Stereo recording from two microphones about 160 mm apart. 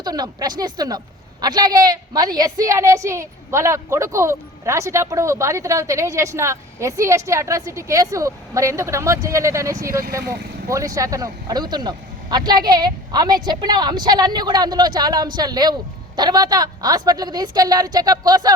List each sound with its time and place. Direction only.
0.0 s a woman's voice: 25° right (ahead or behind)